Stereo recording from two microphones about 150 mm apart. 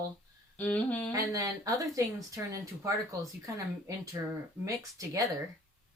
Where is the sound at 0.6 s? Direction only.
10° left (ahead or behind).